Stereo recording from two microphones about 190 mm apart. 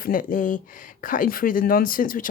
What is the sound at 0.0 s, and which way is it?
Speech, 45° left (ahead or behind).